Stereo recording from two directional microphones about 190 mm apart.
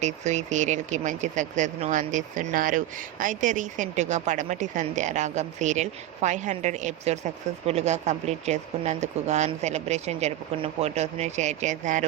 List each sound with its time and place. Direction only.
0.0 s speech: 40° right (ahead or behind)